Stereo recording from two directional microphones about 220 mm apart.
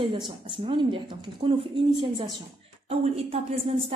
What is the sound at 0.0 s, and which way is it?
A woman's voice, 25° right (ahead or behind).